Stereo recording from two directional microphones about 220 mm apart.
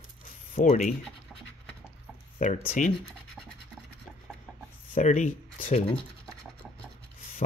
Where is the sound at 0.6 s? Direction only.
35° left (ahead or behind).